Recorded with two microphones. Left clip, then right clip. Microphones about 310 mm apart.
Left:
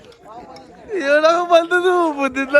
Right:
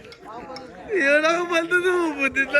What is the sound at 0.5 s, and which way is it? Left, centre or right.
A man's voice, centre.